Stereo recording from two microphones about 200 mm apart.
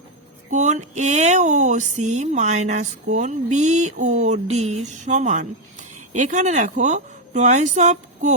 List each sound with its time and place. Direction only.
0.5 s speech: 35° right (ahead or behind)